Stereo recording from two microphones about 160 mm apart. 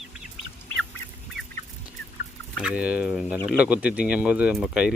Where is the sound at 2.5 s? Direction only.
5° right (ahead or behind).